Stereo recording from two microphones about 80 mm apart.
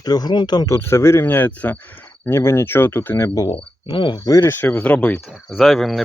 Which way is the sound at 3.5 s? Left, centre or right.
Left.